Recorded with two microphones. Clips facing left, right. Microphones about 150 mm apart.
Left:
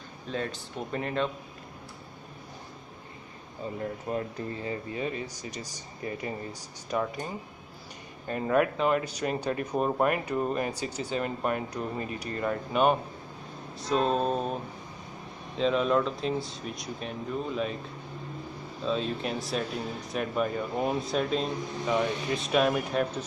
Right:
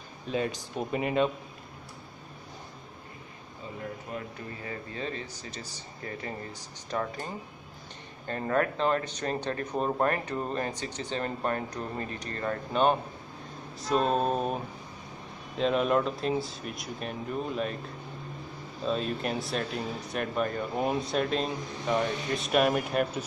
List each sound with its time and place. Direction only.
0.3 s speech: 15° right (ahead or behind)
4.1 s speech: 30° left (ahead or behind)
4.9 s speech: 15° left (ahead or behind)
8.3 s speech: 10° left (ahead or behind)
13.7 s speech: centre (ahead or behind)
18.9 s speech: 5° right (ahead or behind)